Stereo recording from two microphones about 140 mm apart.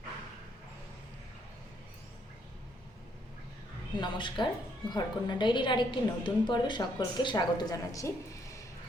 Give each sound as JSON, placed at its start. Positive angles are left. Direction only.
{"t": 3.9, "sound": "a woman's voice", "side_deg": 35}